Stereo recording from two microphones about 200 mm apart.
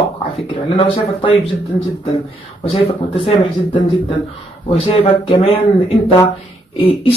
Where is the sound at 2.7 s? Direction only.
30° left (ahead or behind).